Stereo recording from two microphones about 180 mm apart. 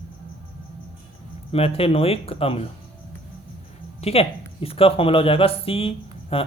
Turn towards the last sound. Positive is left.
turn(degrees=30)  # may be behind; listen again after turning